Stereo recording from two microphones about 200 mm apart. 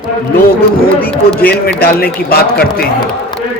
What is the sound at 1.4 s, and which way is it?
Speech, 50° left (ahead or behind).